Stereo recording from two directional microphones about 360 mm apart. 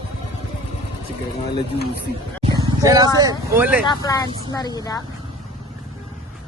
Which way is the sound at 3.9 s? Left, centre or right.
Centre.